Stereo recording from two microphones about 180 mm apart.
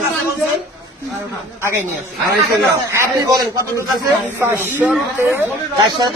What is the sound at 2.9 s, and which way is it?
Speech, 15° right (ahead or behind).